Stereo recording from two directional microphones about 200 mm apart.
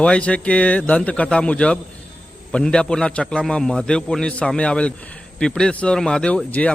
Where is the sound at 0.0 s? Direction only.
5° left (ahead or behind).